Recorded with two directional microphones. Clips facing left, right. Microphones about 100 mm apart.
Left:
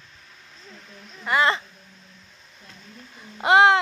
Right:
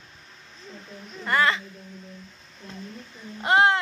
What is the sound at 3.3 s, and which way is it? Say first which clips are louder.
Speech: left 4 dB; 90° left.